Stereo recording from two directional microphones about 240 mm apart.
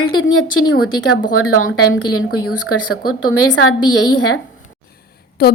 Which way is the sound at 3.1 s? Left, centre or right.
Left.